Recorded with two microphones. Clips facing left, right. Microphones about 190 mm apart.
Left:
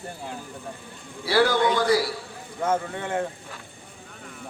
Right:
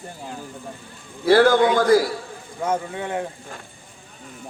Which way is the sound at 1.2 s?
50° right (ahead or behind).